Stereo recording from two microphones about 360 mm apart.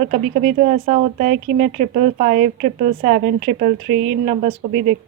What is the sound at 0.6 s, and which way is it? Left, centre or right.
Speech, centre.